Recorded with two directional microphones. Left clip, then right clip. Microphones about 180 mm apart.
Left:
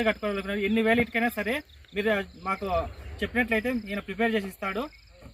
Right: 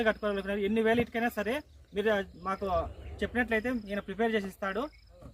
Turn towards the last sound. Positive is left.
turn(degrees=-5)  # may be behind; listen again after turning